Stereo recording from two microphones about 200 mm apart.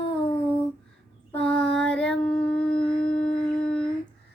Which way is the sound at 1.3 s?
5° left (ahead or behind).